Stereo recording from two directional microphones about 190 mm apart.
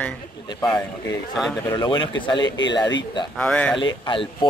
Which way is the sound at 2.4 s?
70° left (ahead or behind).